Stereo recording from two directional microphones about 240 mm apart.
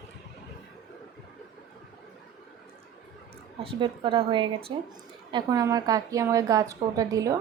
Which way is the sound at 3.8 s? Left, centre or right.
Right.